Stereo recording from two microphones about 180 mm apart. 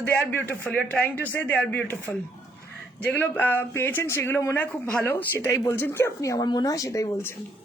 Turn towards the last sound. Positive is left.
turn(degrees=15)  # may be behind; listen again after turning